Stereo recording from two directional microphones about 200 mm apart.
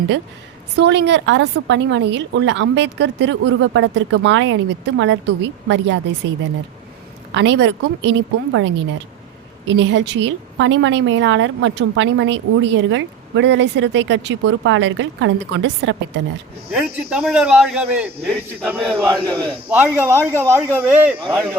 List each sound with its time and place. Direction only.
0.8 s a woman's voice: 60° right (ahead or behind)
7.3 s a woman's voice: 65° right (ahead or behind)
16.7 s a man's voice: 5° right (ahead or behind)